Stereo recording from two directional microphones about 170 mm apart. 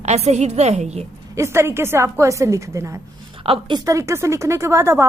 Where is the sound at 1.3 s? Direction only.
15° right (ahead or behind).